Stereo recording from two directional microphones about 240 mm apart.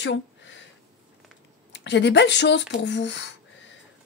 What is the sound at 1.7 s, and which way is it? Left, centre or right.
Speech, left.